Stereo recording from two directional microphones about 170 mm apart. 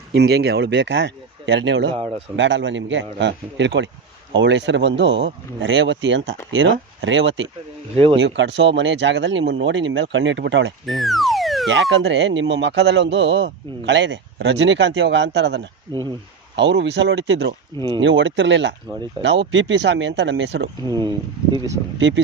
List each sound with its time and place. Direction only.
0.1 s speech: 75° right (ahead or behind); by 10.7 s 90° right
10.8 s speech: centre (ahead or behind)
11.7 s speech: 90° right
15.9 s speech: 25° right (ahead or behind)
16.6 s speech: 90° right
20.8 s speech: 25° right (ahead or behind)
21.9 s speech: 90° right